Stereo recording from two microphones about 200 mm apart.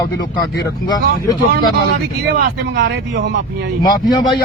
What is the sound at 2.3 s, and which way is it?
Speech, 55° right (ahead or behind).